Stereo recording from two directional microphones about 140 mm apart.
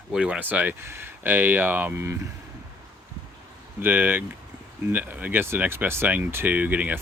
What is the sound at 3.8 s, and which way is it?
Speech, 15° right (ahead or behind).